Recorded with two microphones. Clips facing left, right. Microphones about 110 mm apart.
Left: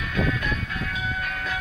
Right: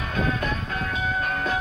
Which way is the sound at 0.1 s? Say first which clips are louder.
Even; 35° right (ahead or behind).